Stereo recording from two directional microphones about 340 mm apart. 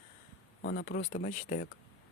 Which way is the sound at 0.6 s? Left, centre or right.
Left.